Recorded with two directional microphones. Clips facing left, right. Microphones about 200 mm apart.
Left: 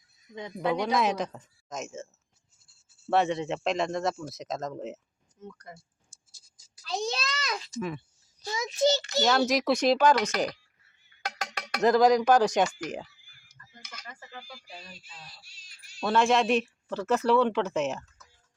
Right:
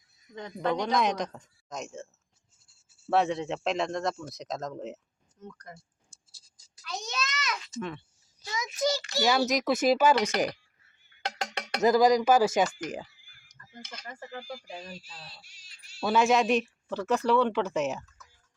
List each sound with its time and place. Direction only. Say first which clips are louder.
0.3 s speech: left 1 dB; 10° left (ahead or behind)
3.1 s speech: left 1 dB; centre (ahead or behind)
6.8 s a sound: left 5 dB; 30° left (ahead or behind)
7.7 s speech: left 2 dB; 10° left (ahead or behind)
8.4 s a child's voice: left 4 dB; 30° left (ahead or behind)
9.5 s speech: left 1 dB; centre (ahead or behind)
11.2 s music: right 2 dB; 25° right (ahead or behind)
11.8 s speech: left 1 dB; centre (ahead or behind)
13.6 s a sound: right 2 dB; 40° right (ahead or behind)
14.1 s speech: right 7 dB; 50° right (ahead or behind)
15.4 s crying: right 2 dB; 20° right (ahead or behind)
15.8 s a sound: right 1 dB; 15° left (ahead or behind)
16.0 s speech: even; centre (ahead or behind)